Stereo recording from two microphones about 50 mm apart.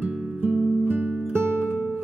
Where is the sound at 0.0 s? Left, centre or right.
Right.